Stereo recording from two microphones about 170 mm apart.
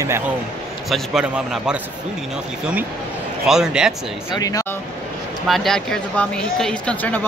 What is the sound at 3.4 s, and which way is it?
Speech, 5° right (ahead or behind).